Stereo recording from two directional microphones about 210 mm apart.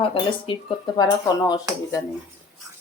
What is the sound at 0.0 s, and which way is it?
Speech, 25° left (ahead or behind).